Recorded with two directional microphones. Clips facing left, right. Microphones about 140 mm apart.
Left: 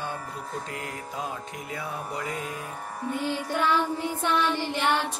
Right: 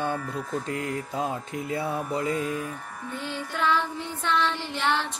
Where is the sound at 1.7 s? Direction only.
30° right (ahead or behind).